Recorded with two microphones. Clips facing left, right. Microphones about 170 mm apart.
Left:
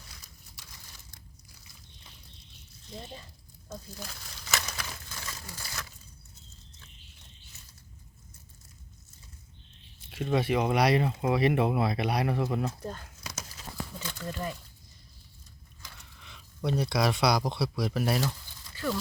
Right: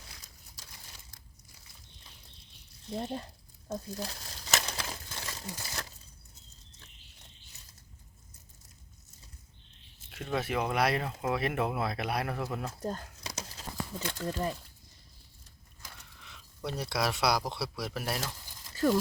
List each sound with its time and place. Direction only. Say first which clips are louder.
2.9 s speech: right 8 dB; 55° right (ahead or behind)
3.7 s crumpling: right 5 dB; 35° right (ahead or behind)
10.1 s speech: left 6 dB; 5° left (ahead or behind)
12.8 s a sound: right 3 dB; 35° right (ahead or behind)
14.1 s speech: right 3 dB; 35° right (ahead or behind)
16.6 s speech: left 5 dB; centre (ahead or behind)
18.7 s a sound: right 5 dB; 40° right (ahead or behind)